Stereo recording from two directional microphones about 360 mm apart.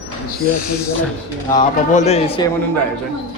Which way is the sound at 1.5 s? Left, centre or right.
Centre.